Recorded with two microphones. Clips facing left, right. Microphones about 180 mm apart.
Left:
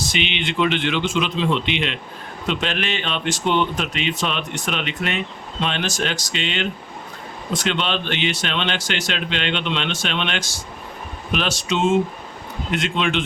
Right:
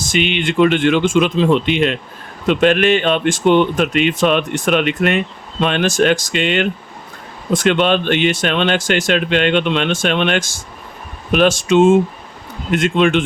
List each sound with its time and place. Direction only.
0.0 s speech: 50° right (ahead or behind)